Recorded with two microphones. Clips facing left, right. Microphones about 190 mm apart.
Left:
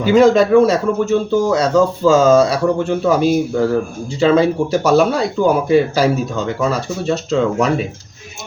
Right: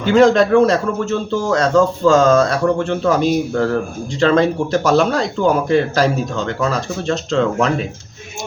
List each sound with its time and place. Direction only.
0.0 s a man's voice: 5° left (ahead or behind)